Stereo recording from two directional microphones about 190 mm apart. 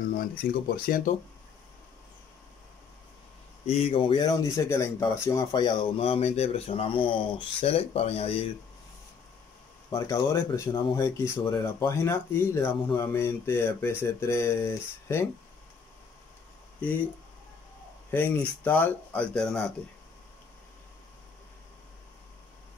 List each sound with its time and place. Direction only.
0.1 s speech: 50° left (ahead or behind)
3.9 s speech: 25° left (ahead or behind)
9.9 s speech: 15° left (ahead or behind)
18.1 s speech: 10° left (ahead or behind)